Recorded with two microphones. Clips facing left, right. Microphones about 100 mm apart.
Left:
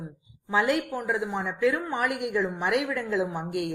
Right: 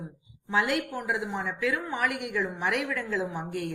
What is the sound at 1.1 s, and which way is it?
A woman's voice, 35° left (ahead or behind).